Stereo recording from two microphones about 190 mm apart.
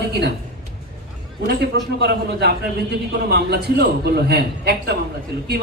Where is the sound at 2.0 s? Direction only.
60° right (ahead or behind).